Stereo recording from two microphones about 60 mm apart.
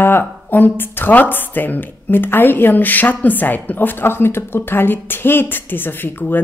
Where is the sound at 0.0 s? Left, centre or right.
Left.